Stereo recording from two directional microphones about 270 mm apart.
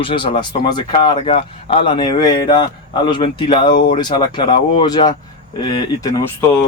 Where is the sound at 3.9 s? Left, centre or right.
Centre.